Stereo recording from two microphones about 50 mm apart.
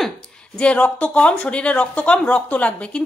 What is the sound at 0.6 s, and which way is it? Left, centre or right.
A woman's voice, left.